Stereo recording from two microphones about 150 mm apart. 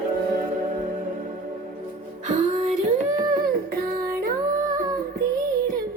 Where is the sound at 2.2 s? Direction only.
55° right (ahead or behind).